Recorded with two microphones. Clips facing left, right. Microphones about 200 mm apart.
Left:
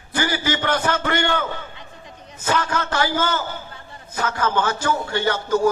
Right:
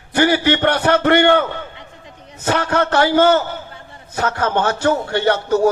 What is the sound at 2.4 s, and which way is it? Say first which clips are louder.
A man's voice: right 5 dB; 65° right (ahead or behind).